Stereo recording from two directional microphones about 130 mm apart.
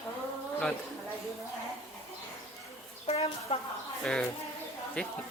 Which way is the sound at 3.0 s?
50° left (ahead or behind).